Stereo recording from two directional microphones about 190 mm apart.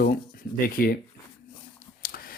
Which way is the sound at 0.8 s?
50° left (ahead or behind).